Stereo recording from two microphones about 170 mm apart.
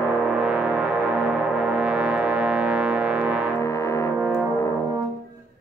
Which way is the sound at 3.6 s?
15° left (ahead or behind).